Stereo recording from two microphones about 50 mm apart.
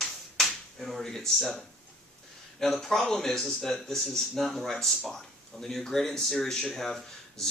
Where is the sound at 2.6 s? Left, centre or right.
Centre.